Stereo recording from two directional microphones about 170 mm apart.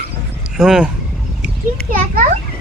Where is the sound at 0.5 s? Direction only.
5° right (ahead or behind).